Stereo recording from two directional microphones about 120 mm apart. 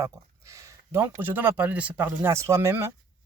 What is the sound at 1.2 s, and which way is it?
Speech, 15° right (ahead or behind).